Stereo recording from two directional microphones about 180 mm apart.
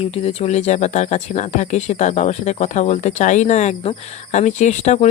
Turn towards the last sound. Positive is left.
turn(degrees=40)  # may be behind; listen again after turning